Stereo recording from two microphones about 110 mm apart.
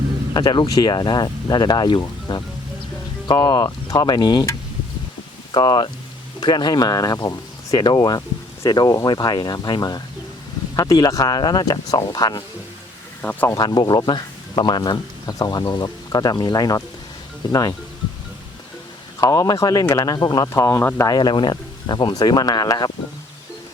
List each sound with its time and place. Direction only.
0.3 s speech: 40° left (ahead or behind)
5.5 s speech: 40° left (ahead or behind)
13.5 s speech: 35° left (ahead or behind)
19.2 s speech: 35° left (ahead or behind)
20.5 s speech: 25° left (ahead or behind)
21.1 s speech: 40° left (ahead or behind)